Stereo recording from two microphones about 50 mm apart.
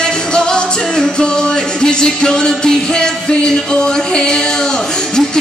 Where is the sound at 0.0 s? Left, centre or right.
Centre.